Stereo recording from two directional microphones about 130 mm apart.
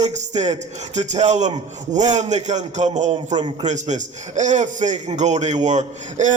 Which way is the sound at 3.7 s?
65° right (ahead or behind).